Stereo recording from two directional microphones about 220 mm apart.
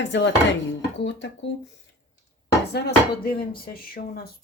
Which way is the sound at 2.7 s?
45° left (ahead or behind).